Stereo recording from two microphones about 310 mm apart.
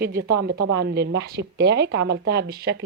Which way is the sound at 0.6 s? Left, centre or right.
Right.